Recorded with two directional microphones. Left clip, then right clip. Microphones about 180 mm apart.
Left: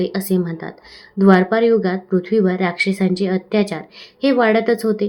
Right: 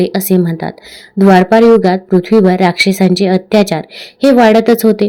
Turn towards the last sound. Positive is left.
turn(degrees=-40)  # may be behind; listen again after turning